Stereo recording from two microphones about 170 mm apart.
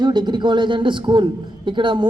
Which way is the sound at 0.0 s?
25° right (ahead or behind).